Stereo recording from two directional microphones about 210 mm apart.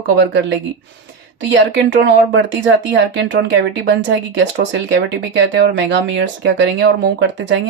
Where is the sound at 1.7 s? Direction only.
55° right (ahead or behind).